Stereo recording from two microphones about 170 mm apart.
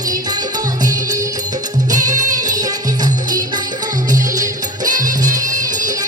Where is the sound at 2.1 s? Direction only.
50° right (ahead or behind).